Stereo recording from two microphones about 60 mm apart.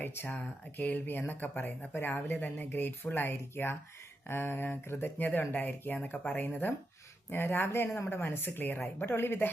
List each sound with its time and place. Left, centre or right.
0.0 s speech: left
1.9 s speech: left